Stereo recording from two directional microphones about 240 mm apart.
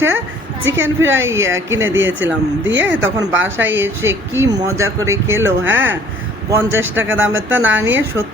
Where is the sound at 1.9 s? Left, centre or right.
Right.